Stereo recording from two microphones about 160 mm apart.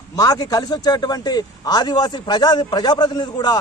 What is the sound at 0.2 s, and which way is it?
Speech, 25° left (ahead or behind).